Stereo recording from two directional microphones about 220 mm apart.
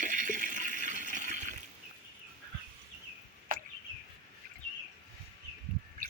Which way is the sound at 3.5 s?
40° right (ahead or behind).